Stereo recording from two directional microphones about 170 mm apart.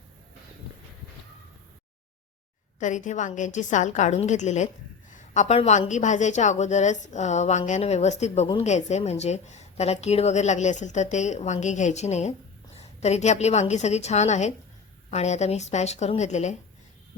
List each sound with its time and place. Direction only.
2.7 s a woman's voice: 45° left (ahead or behind)